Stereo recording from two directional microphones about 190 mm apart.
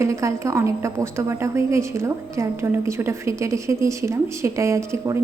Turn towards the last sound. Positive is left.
turn(degrees=-15)  # may be behind; listen again after turning